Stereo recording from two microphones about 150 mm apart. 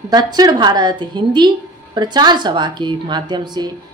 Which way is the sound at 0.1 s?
25° right (ahead or behind).